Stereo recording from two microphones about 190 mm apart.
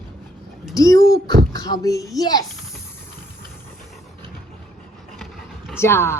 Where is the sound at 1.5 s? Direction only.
20° left (ahead or behind).